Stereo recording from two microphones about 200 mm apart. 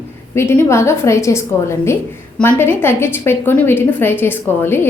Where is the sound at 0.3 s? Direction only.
15° left (ahead or behind).